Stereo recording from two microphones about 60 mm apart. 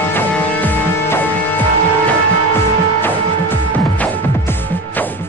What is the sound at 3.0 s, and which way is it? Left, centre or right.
Music, left.